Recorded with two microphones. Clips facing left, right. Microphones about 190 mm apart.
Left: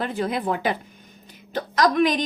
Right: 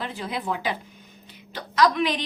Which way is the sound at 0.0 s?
50° left (ahead or behind).